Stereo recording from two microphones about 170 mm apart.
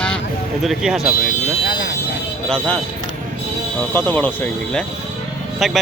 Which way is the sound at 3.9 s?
10° left (ahead or behind).